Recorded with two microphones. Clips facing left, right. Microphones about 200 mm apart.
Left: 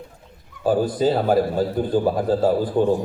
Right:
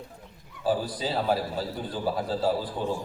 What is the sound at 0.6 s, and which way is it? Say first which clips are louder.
A man's voice: left 9 dB; 50° left (ahead or behind).